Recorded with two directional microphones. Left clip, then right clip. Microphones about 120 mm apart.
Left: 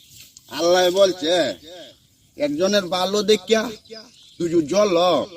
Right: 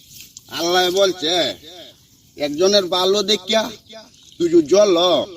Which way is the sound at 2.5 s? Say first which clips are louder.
Right 5 dB; 25° left (ahead or behind).